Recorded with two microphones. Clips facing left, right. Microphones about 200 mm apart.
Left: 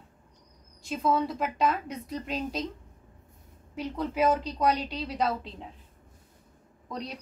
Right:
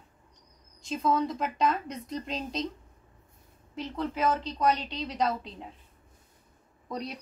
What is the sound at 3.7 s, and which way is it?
A woman's voice, 10° left (ahead or behind).